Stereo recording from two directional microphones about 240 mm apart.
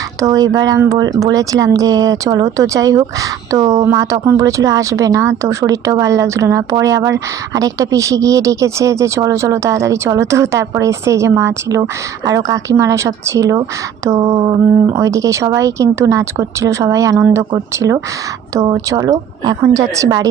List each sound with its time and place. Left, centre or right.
0.2 s speech: centre